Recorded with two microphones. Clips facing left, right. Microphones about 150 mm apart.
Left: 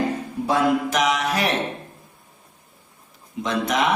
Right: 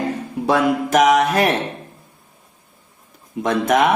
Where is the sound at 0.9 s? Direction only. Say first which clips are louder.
Right 7 dB; 50° right (ahead or behind).